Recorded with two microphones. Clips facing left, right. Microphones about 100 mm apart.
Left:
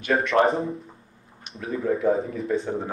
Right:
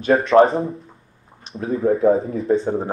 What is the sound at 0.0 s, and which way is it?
Speech, 30° right (ahead or behind).